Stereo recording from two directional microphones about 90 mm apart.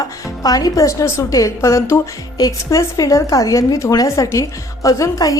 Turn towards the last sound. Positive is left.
turn(degrees=40)  # may be behind; listen again after turning